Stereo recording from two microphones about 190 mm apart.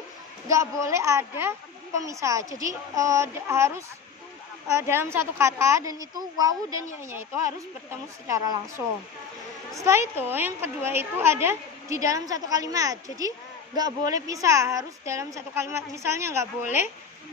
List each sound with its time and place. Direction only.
0.5 s a woman's voice: 15° right (ahead or behind)